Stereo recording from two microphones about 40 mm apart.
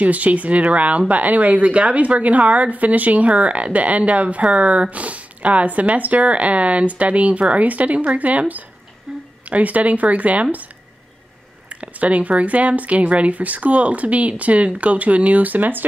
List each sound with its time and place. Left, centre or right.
0.0 s speech: right
9.1 s a sound: centre
9.5 s speech: right
11.7 s speech: right